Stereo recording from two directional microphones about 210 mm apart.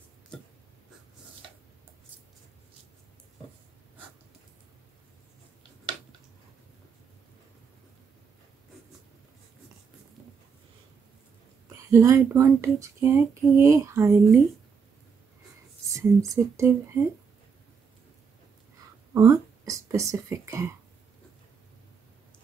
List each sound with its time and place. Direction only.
11.7 s speech: 15° right (ahead or behind)
15.9 s speech: 15° right (ahead or behind)
19.1 s speech: 15° right (ahead or behind)